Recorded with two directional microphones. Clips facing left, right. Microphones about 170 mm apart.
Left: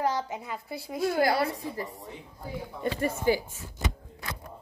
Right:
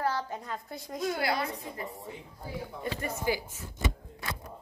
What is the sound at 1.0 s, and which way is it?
Speech, 60° left (ahead or behind).